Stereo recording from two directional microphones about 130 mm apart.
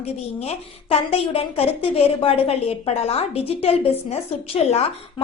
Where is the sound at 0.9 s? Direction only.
50° left (ahead or behind).